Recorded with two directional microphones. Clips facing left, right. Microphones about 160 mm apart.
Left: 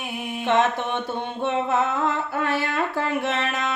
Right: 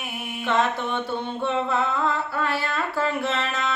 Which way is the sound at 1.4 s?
20° left (ahead or behind).